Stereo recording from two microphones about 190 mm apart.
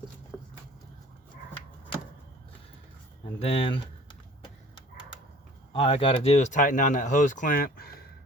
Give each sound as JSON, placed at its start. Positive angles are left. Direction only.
{"t": 3.4, "sound": "speech", "side_deg": 30}
{"t": 5.7, "sound": "speech", "side_deg": 30}